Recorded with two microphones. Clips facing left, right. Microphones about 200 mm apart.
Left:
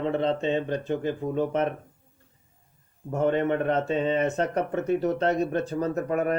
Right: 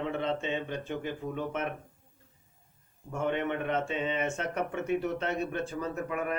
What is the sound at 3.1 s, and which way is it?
Speech, 40° left (ahead or behind).